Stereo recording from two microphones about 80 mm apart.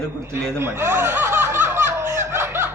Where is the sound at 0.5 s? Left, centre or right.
Right.